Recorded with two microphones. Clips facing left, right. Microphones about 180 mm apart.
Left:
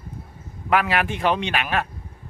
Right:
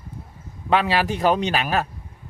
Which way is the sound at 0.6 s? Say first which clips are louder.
Right 1 dB; 30° right (ahead or behind).